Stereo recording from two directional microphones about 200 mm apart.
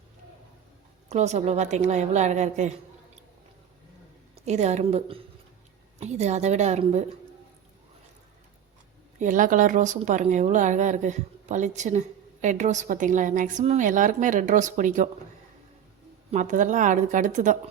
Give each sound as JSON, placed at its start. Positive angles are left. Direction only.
{"t": 1.1, "sound": "speech", "side_deg": -35}
{"t": 4.4, "sound": "speech", "side_deg": -35}
{"t": 9.1, "sound": "speech", "side_deg": -40}
{"t": 16.3, "sound": "speech", "side_deg": -40}